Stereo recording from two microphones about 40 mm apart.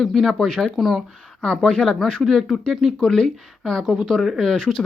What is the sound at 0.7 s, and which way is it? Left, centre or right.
Speech, centre.